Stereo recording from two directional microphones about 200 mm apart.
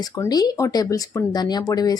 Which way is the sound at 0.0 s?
15° left (ahead or behind).